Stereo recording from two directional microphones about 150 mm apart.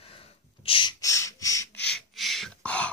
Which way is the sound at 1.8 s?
5° left (ahead or behind).